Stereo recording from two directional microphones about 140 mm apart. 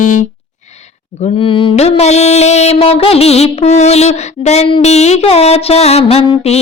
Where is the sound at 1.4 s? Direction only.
40° left (ahead or behind).